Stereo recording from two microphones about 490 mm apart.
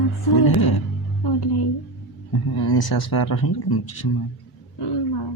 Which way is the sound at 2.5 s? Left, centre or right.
Left.